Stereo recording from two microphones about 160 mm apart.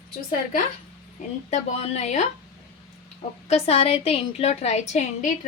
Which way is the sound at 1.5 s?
45° left (ahead or behind).